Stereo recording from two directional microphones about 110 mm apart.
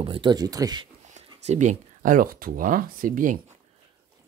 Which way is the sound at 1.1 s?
90° right.